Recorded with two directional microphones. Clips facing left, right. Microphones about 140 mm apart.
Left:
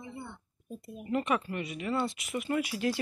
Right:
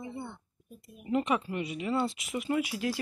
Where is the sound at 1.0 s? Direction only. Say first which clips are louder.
Right 1 dB; 15° right (ahead or behind).